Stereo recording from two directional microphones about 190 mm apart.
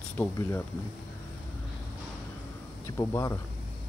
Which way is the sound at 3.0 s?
15° left (ahead or behind).